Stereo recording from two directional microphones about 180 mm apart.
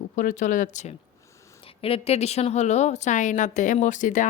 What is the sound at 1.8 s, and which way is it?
A woman's voice, 30° left (ahead or behind).